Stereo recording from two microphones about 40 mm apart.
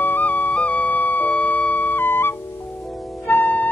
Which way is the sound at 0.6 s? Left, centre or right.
Left.